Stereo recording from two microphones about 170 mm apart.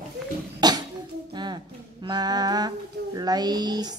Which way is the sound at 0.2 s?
5° right (ahead or behind).